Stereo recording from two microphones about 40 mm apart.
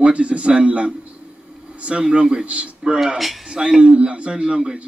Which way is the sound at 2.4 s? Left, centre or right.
Right.